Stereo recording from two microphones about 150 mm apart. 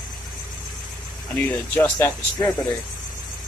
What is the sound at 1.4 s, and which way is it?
Speech, 15° left (ahead or behind).